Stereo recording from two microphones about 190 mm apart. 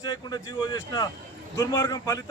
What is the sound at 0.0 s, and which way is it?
Speech, 20° left (ahead or behind).